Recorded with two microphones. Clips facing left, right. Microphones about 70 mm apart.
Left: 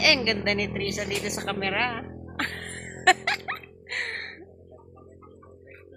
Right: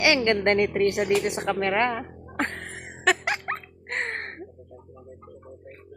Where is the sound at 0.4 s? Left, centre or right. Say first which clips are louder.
Right 7 dB; right.